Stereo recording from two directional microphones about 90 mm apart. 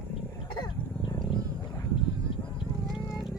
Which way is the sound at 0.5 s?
60° left (ahead or behind).